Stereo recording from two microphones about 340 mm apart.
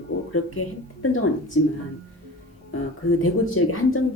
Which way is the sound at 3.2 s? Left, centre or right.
Left.